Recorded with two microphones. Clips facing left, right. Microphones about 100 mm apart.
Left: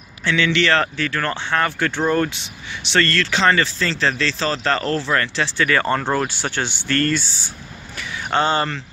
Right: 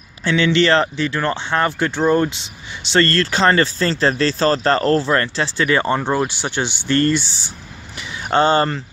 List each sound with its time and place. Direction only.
0.3 s speech: 35° right (ahead or behind)
2.9 s speech: 35° right (ahead or behind)
5.7 s speech: 20° right (ahead or behind)
8.3 s speech: 35° right (ahead or behind)